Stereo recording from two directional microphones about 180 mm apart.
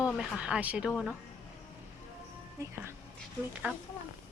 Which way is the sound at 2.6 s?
15° right (ahead or behind).